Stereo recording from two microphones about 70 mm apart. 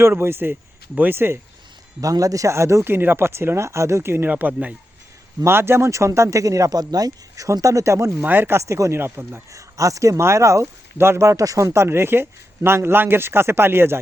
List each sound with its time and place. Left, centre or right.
0.0 s speech: right
2.0 s speech: right
4.3 s speech: right
5.5 s speech: right
8.2 s speech: right
8.6 s speech: right
9.5 s speech: right